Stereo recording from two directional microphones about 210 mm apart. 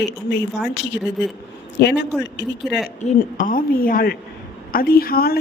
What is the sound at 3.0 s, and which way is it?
A woman's voice, 35° left (ahead or behind).